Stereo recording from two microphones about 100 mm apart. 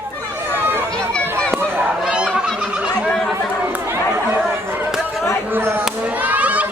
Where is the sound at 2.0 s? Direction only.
10° right (ahead or behind).